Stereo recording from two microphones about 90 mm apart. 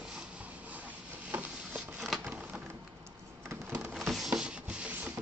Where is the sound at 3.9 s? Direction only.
Centre (ahead or behind); by 5.1 s 15° right (ahead or behind).